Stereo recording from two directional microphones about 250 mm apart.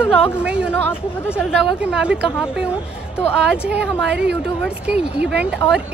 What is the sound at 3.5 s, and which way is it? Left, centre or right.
Speech, centre.